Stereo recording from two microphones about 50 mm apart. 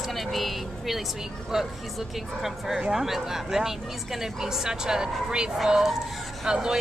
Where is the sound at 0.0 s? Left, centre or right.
Centre.